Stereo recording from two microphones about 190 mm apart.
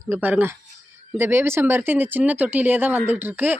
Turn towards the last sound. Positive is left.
turn(degrees=-10)  # may be behind; listen again after turning